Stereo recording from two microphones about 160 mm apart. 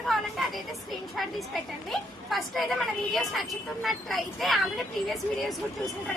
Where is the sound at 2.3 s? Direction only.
Centre (ahead or behind).